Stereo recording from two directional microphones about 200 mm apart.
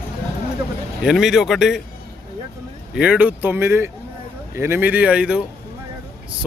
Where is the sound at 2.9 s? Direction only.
5° right (ahead or behind).